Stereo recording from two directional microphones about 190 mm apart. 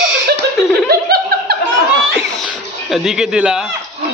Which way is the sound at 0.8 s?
55° right (ahead or behind).